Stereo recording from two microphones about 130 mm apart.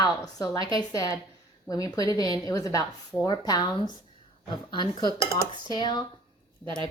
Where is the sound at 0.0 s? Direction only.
30° left (ahead or behind).